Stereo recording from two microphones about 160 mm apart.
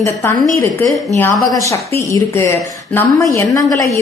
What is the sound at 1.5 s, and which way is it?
A woman's voice, 20° left (ahead or behind).